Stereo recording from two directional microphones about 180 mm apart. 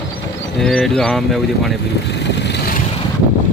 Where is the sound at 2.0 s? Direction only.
70° left (ahead or behind).